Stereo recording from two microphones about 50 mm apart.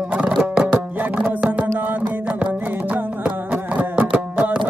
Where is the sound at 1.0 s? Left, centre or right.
Right.